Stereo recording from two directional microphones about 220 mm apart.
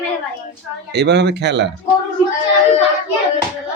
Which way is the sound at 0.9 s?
50° right (ahead or behind).